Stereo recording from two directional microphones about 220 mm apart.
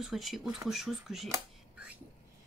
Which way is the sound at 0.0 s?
Centre (ahead or behind).